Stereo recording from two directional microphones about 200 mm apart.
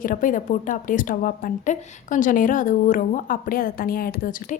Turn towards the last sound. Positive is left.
turn(degrees=45)  # may be behind; listen again after turning